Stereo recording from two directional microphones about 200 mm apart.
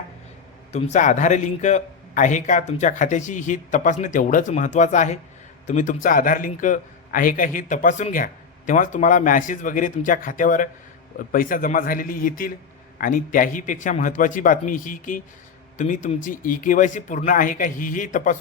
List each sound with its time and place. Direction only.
0.7 s a man's voice: 35° left (ahead or behind)